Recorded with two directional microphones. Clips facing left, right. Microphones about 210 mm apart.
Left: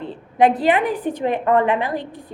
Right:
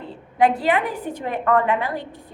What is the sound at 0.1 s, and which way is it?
A woman's voice, 20° left (ahead or behind).